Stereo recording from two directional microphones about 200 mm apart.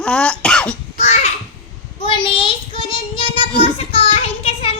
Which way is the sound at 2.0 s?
25° left (ahead or behind).